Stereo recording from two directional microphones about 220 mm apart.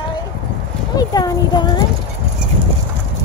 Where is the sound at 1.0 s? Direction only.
15° left (ahead or behind).